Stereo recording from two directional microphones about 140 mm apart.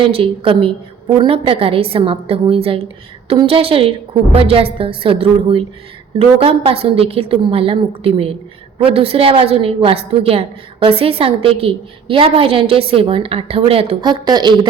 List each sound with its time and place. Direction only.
0.0 s a woman's voice: 40° right (ahead or behind)